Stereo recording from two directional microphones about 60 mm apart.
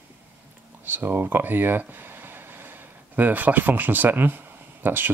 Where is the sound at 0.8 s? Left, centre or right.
Right.